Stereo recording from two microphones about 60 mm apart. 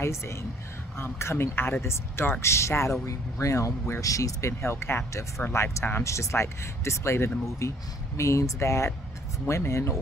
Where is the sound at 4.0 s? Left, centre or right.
Left.